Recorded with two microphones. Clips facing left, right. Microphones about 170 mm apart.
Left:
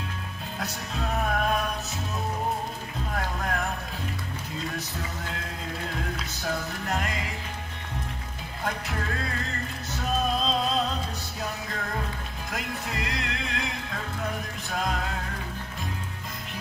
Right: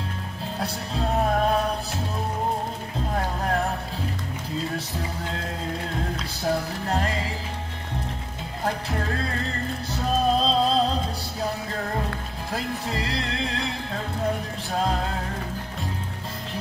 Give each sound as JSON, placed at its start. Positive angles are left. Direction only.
{"t": 0.6, "sound": "music", "side_deg": -30}
{"t": 3.2, "sound": "music", "side_deg": -30}
{"t": 6.5, "sound": "music", "side_deg": -30}
{"t": 9.9, "sound": "music", "side_deg": -30}
{"t": 12.5, "sound": "music", "side_deg": -30}